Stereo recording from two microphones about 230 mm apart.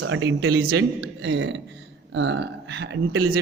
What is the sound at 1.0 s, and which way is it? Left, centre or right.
Speech, right.